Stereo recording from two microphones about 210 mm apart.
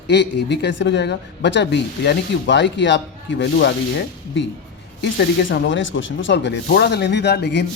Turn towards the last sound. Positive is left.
turn(degrees=55)  # may be behind; listen again after turning